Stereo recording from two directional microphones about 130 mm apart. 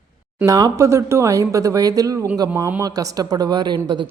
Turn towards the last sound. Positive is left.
turn(degrees=-35)  # may be behind; listen again after turning